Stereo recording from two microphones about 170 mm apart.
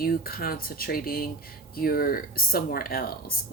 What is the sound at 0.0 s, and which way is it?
Speech, 60° left (ahead or behind).